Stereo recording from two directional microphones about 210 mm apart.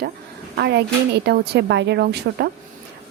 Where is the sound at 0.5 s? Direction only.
50° right (ahead or behind).